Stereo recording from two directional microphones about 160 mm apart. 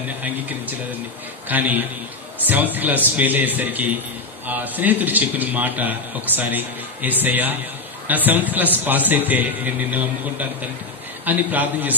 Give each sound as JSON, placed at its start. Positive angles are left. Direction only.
{"t": 0.2, "sound": "a man's voice", "side_deg": -10}
{"t": 11.2, "sound": "a man's voice", "side_deg": -10}